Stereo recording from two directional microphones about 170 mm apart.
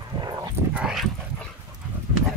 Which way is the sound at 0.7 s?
5° right (ahead or behind).